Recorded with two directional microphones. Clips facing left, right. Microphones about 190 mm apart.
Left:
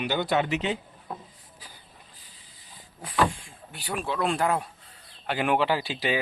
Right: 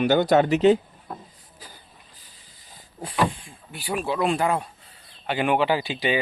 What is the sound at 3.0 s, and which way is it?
Speech, 25° right (ahead or behind).